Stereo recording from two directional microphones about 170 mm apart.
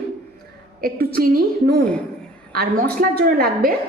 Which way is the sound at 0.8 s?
60° right (ahead or behind).